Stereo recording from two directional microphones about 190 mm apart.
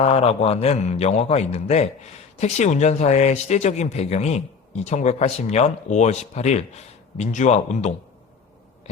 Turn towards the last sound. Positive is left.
turn(degrees=40)  # may be behind; listen again after turning